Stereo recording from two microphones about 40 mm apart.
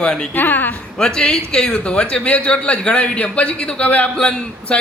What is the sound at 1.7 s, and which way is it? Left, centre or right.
A man's voice, left.